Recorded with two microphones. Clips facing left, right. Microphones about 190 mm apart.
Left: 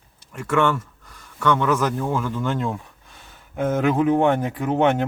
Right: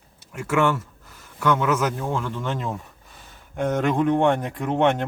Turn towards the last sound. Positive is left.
turn(degrees=5)  # may be behind; listen again after turning